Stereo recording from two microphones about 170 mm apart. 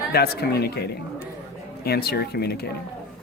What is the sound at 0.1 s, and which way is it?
Speech, 70° left (ahead or behind).